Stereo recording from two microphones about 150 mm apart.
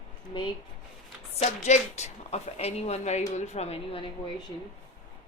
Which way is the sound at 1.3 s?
50° left (ahead or behind).